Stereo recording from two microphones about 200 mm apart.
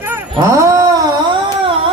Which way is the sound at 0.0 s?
10° right (ahead or behind).